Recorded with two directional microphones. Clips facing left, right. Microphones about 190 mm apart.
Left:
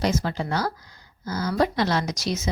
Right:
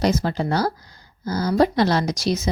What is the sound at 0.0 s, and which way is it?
Speech, 35° right (ahead or behind).